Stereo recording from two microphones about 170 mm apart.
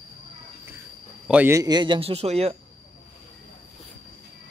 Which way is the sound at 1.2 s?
10° right (ahead or behind).